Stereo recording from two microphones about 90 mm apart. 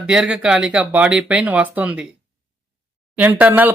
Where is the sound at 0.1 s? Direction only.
10° right (ahead or behind).